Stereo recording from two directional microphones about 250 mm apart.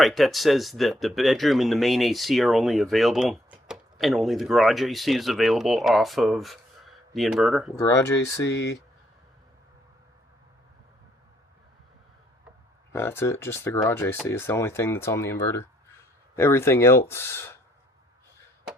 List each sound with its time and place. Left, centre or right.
0.0 s speech: centre
7.8 s speech: centre
12.9 s speech: centre